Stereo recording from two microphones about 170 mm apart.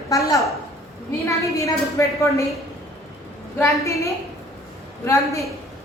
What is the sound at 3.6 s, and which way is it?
A woman's voice, 15° left (ahead or behind).